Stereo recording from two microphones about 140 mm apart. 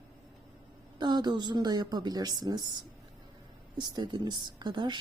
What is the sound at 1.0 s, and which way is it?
A woman's voice, 30° right (ahead or behind).